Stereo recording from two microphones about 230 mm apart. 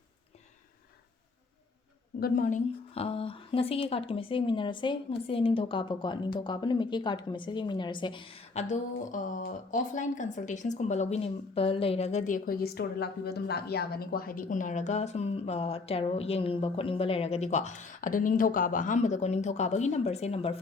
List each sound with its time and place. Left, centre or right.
2.2 s a woman's voice: left